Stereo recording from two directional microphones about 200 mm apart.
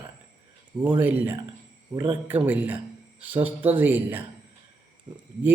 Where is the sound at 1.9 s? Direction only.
20° right (ahead or behind).